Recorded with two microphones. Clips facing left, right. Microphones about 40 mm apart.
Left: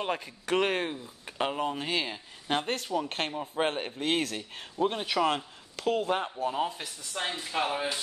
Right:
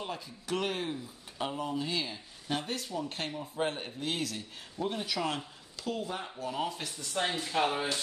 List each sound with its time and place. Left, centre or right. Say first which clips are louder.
0.0 s speech: left 7 dB; left
6.4 s speech: left 4 dB; left
6.8 s speech: right 1 dB; centre